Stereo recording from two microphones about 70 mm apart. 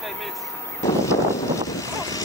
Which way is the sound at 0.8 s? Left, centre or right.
Left.